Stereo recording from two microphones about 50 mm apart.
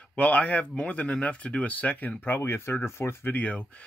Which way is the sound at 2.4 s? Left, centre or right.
Left.